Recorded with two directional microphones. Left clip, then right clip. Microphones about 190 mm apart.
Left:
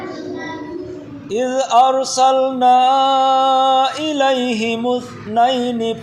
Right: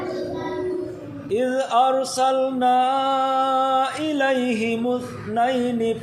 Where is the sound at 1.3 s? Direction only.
25° left (ahead or behind).